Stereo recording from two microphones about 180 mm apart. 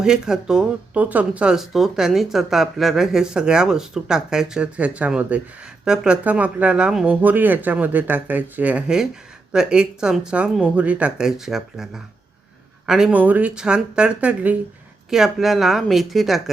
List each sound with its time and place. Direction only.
0.0 s speech: 5° right (ahead or behind)